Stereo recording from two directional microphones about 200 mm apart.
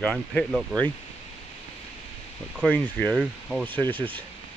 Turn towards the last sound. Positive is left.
turn(degrees=-25)  # may be behind; listen again after turning